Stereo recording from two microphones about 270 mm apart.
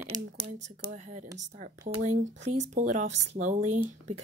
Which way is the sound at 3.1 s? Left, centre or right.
Right.